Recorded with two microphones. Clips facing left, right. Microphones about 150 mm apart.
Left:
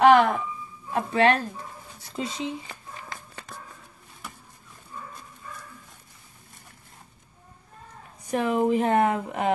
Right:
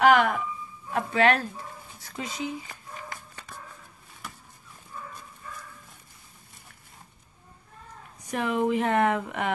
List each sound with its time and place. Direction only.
0.0 s a sound: 35° left (ahead or behind)
0.9 s speech: 30° left (ahead or behind)
8.3 s speech: 40° left (ahead or behind)